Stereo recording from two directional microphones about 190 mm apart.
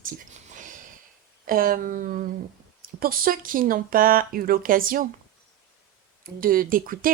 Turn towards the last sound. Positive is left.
turn(degrees=-50)  # may be behind; listen again after turning